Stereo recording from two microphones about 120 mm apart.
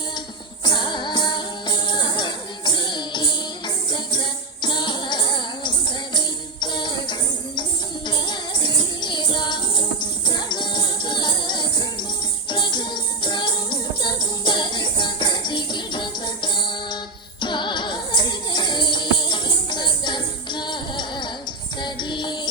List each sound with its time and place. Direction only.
0.6 s music: 40° left (ahead or behind)
4.6 s music: 40° left (ahead or behind)